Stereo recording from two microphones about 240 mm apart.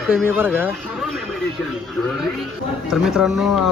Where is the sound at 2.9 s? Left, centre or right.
Centre.